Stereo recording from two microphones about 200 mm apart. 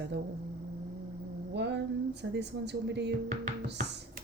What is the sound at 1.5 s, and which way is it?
Speech, 60° right (ahead or behind).